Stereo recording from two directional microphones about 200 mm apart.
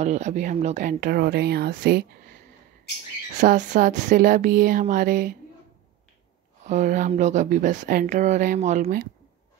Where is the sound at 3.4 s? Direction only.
40° right (ahead or behind).